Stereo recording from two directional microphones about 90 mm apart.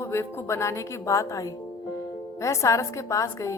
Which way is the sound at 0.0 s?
30° left (ahead or behind).